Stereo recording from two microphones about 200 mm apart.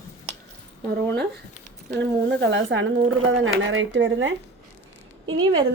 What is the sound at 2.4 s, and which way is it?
Speech, 65° right (ahead or behind).